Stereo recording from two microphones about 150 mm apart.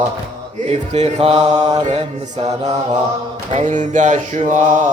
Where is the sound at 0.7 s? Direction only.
45° right (ahead or behind).